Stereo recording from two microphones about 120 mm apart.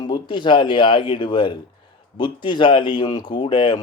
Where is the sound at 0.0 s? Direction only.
40° left (ahead or behind).